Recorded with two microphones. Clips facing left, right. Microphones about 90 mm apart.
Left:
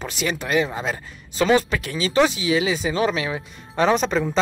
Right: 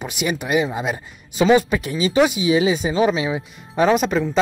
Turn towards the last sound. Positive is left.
turn(degrees=-5)  # may be behind; listen again after turning